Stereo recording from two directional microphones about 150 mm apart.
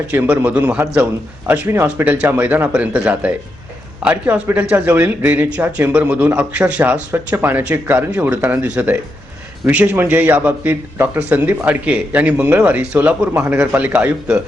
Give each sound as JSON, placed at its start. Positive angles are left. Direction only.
{"t": 0.1, "sound": "speech", "side_deg": -10}